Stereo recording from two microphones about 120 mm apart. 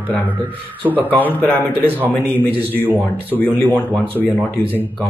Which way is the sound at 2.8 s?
15° right (ahead or behind).